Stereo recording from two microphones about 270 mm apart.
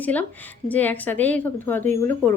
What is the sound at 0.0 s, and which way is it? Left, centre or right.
A woman's voice, centre.